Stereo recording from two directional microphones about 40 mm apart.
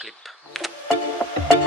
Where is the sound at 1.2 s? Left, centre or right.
Left.